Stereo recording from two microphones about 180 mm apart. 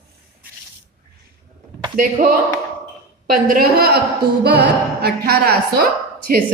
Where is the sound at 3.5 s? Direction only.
55° right (ahead or behind).